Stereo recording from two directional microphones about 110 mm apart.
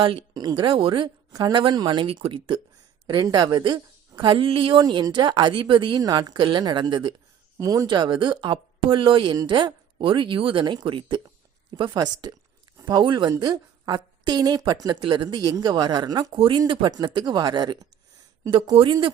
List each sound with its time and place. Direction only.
0.0 s a woman's voice: 50° right (ahead or behind)
2.0 s a woman's voice: 55° right (ahead or behind)
6.0 s a woman's voice: 35° right (ahead or behind)
7.6 s speech: 30° right (ahead or behind)
7.9 s a woman's voice: 45° right (ahead or behind)
16.3 s a woman's voice: 50° right (ahead or behind)